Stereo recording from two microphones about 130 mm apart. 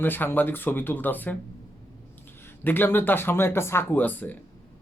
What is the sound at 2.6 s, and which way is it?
Speech, 15° left (ahead or behind).